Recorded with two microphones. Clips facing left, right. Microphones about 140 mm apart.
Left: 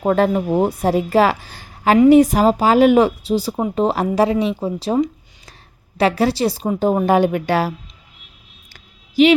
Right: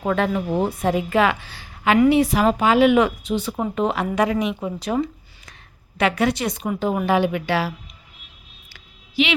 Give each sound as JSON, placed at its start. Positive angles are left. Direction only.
{"t": 0.0, "sound": "a woman's voice", "side_deg": 40}
{"t": 6.0, "sound": "a woman's voice", "side_deg": 35}
{"t": 8.7, "sound": "a sound", "side_deg": 45}